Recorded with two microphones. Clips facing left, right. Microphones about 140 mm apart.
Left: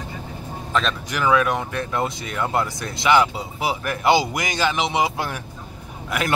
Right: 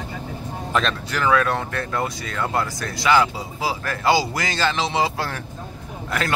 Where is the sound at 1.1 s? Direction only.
15° left (ahead or behind).